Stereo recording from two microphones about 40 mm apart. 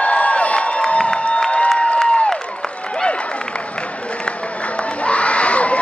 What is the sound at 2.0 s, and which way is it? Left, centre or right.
Crowd, left.